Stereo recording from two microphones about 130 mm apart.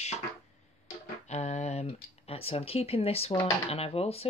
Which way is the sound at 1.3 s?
60° left (ahead or behind).